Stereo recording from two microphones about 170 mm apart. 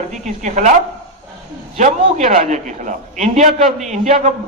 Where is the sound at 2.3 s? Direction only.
45° right (ahead or behind).